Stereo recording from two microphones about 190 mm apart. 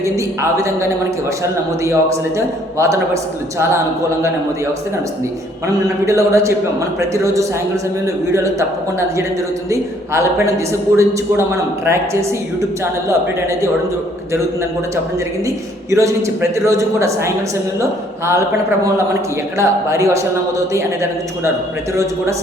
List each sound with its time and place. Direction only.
0.5 s a man's voice: 15° right (ahead or behind)
5.6 s a man's voice: 15° right (ahead or behind)
12.8 s a man's voice: 15° right (ahead or behind)
15.4 s a man's voice: 15° right (ahead or behind)
19.5 s a man's voice: 15° right (ahead or behind)